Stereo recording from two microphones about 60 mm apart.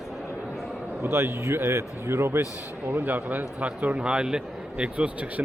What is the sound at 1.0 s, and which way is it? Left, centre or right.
A man's voice, right.